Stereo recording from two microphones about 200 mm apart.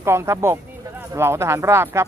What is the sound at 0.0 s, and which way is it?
Speech, 15° right (ahead or behind).